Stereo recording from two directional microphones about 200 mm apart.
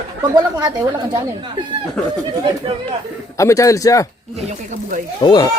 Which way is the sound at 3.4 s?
15° left (ahead or behind).